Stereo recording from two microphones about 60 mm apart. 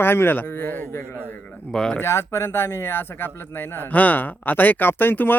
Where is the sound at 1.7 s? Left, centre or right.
Centre.